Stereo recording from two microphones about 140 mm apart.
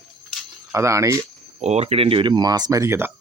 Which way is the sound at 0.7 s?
20° right (ahead or behind).